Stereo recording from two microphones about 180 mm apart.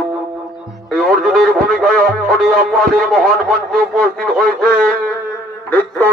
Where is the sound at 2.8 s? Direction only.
55° right (ahead or behind).